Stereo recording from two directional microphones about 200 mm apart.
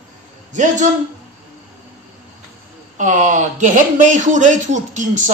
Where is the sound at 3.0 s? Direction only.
40° right (ahead or behind).